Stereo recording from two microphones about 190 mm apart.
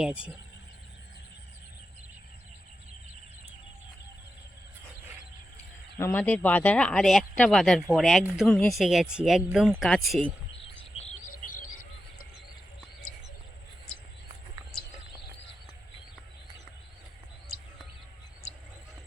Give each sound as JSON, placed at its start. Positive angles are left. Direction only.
{"t": 0.0, "sound": "speech", "side_deg": -5}
{"t": 6.0, "sound": "speech", "side_deg": 10}
{"t": 11.0, "sound": "cricket", "side_deg": 35}